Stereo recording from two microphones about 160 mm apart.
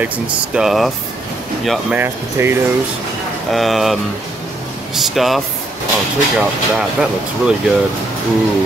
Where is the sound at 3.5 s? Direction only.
Centre (ahead or behind).